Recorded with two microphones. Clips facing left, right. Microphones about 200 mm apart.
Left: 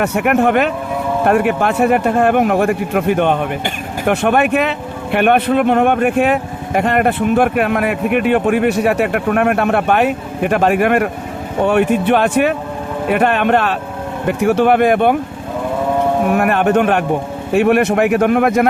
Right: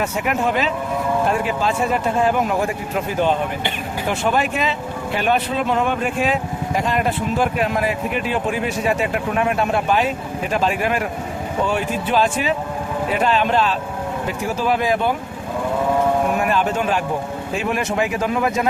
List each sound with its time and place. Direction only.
0.0 s speech: 65° left (ahead or behind)
16.3 s speech: 60° left (ahead or behind)